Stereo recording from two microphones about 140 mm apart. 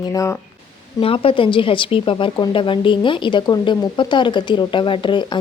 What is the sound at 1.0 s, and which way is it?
Speech, 40° left (ahead or behind).